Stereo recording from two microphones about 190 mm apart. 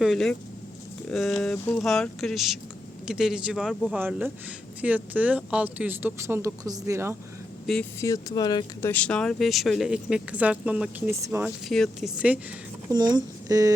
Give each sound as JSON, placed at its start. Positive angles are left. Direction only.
{"t": 0.0, "sound": "speech", "side_deg": 0}
{"t": 7.7, "sound": "speech", "side_deg": 0}
{"t": 8.0, "sound": "speech", "side_deg": 20}
{"t": 8.9, "sound": "speech", "side_deg": 5}
{"t": 11.7, "sound": "speech", "side_deg": 0}
{"t": 12.9, "sound": "speech", "side_deg": -20}